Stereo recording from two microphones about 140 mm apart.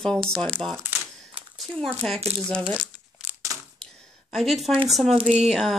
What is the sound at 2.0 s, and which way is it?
Speech, 5° left (ahead or behind).